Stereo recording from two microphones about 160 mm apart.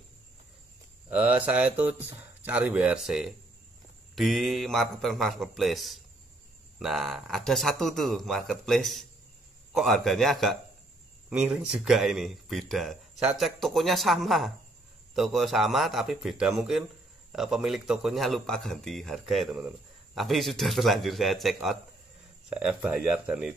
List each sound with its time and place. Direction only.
1.1 s a man's voice: 10° right (ahead or behind)